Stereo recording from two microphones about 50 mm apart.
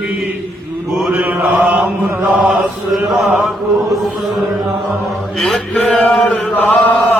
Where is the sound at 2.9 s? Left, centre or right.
Centre.